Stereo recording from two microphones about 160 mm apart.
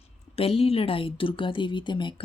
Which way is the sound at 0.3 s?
40° left (ahead or behind).